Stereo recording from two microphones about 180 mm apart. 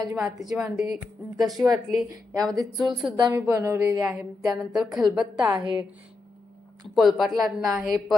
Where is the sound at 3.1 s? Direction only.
20° right (ahead or behind).